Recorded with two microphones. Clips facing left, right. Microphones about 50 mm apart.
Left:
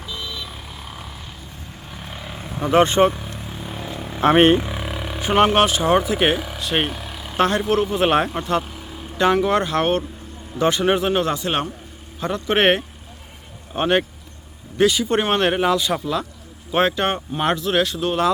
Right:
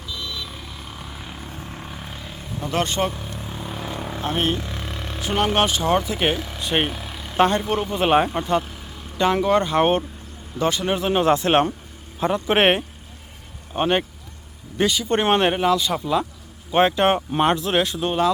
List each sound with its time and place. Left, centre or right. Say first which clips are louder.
0.2 s vehicle: left 1 dB; centre
2.3 s vehicle: left 5 dB; left
2.6 s speech: left 8 dB; centre
3.2 s vehicle: even; centre
4.2 s speech: left 10 dB; left
4.6 s vehicle: left 4 dB; centre
5.5 s speech: left 3 dB; centre
9.7 s speech: right 1 dB; centre
10.6 s speech: left 4 dB; centre
11.3 s a man's voice: right 5 dB; right
12.3 s speech: left 1 dB; centre
13.7 s speech: left 2 dB; centre
16.7 s speech: right 2 dB; centre